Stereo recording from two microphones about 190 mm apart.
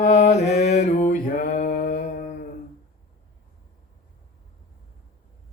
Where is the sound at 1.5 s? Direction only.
45° left (ahead or behind).